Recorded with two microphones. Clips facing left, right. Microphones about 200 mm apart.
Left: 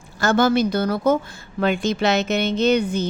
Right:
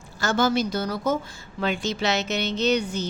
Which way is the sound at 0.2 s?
55° left (ahead or behind).